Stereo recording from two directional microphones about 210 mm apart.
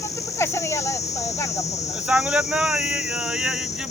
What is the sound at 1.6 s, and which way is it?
Speech, 30° left (ahead or behind).